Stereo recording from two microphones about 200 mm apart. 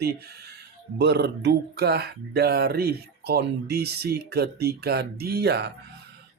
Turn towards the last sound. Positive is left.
turn(degrees=-55)  # may be behind; listen again after turning